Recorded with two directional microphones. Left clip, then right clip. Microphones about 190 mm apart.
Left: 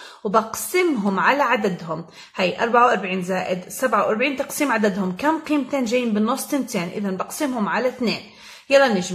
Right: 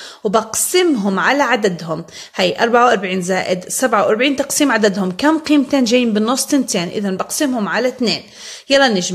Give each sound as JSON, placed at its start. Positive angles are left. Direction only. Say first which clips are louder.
{"t": 0.2, "sound": "a woman's voice", "louder": "right 4 dB", "side_deg": -25}